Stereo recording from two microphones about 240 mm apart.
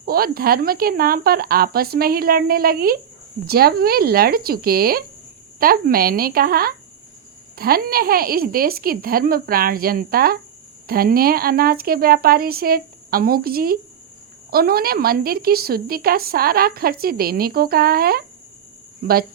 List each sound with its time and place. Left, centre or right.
0.0 s speech: right